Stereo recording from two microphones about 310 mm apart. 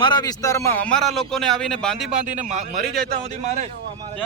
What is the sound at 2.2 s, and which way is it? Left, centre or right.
Speech, right.